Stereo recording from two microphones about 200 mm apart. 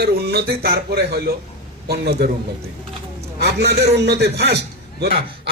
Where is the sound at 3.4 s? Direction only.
55° right (ahead or behind).